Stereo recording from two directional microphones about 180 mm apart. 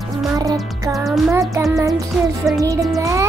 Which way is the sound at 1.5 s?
15° right (ahead or behind).